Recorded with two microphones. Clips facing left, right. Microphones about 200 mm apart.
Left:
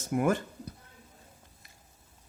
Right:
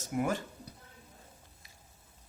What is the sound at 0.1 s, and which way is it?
Speech, 50° left (ahead or behind).